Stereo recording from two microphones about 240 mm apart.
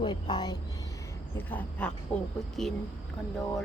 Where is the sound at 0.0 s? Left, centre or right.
Centre.